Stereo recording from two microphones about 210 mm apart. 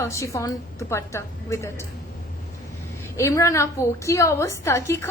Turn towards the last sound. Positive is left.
turn(degrees=15)  # may be behind; listen again after turning